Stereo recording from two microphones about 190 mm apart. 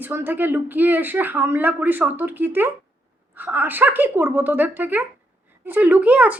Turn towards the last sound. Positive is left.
turn(degrees=-5)  # may be behind; listen again after turning